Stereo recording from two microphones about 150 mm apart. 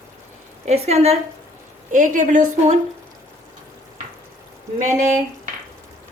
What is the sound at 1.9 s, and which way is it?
Speech, 60° right (ahead or behind).